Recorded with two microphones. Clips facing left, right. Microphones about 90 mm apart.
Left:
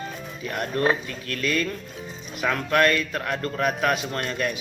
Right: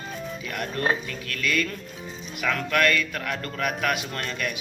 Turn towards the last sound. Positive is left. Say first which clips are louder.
# left 3 dB
turn(degrees=35)  # may be behind; listen again after turning